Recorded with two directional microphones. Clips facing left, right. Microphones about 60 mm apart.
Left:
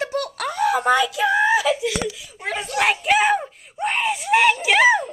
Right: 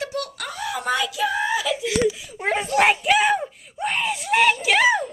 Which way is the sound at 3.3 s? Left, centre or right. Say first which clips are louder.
Left 1 dB; centre.